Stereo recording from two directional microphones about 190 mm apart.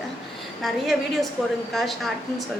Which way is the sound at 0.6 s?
Centre (ahead or behind).